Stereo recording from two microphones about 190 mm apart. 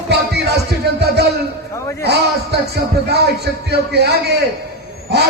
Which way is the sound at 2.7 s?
55° right (ahead or behind).